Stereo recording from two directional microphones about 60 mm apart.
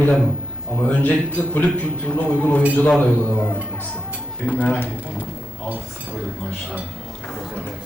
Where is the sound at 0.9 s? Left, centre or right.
Left.